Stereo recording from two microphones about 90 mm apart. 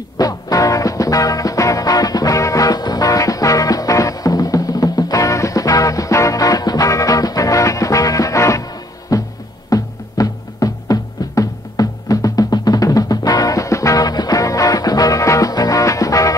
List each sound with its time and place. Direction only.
0.2 s music: 40° left (ahead or behind)